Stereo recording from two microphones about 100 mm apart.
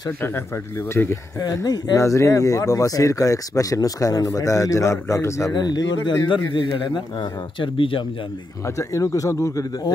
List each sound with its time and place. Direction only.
0.2 s speech: 25° left (ahead or behind)
1.4 s speech: 40° left (ahead or behind)
2.0 s speech: 30° left (ahead or behind)
5.5 s a man's voice: 45° left (ahead or behind); by 8.0 s 60° left (ahead or behind)
8.6 s speech: 30° left (ahead or behind)